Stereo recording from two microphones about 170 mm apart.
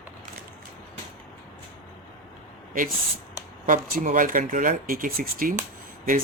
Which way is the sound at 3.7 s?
50° right (ahead or behind).